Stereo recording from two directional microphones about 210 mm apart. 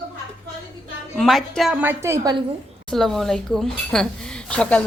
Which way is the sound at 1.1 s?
Centre (ahead or behind).